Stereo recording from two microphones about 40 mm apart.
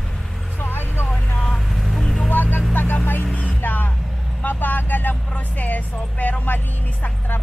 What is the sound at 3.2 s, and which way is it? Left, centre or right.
Music, left.